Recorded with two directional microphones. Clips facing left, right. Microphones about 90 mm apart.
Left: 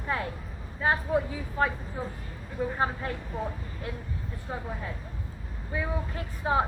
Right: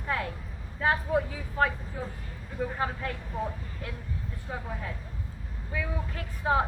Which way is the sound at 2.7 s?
25° left (ahead or behind).